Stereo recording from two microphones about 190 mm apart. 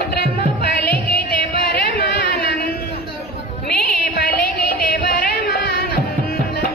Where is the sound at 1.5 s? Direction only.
55° left (ahead or behind).